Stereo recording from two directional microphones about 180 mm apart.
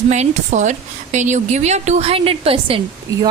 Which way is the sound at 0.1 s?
40° right (ahead or behind).